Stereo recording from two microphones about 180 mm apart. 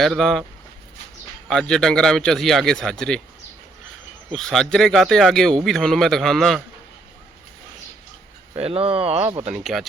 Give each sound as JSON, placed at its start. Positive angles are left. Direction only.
{"t": 0.0, "sound": "a man's voice", "side_deg": 0}
{"t": 1.5, "sound": "a man's voice", "side_deg": 5}
{"t": 4.3, "sound": "a man's voice", "side_deg": 5}
{"t": 8.5, "sound": "speech", "side_deg": -35}